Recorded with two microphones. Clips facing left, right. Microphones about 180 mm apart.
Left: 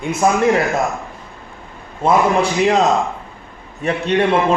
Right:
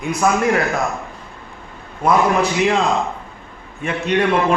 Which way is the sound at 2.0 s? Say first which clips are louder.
Left 1 dB; 35° left (ahead or behind).